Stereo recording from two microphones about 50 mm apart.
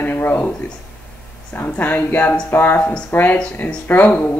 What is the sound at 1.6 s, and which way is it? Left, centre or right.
Speech, left.